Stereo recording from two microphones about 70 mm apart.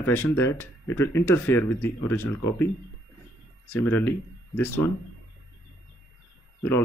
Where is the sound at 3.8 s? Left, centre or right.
Left.